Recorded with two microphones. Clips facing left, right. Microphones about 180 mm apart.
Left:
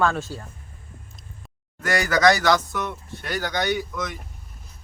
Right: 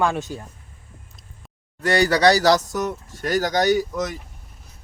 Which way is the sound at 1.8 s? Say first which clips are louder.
Right 3 dB; 35° right (ahead or behind).